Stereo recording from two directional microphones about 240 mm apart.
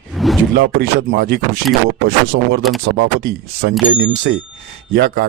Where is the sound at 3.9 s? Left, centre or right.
Right.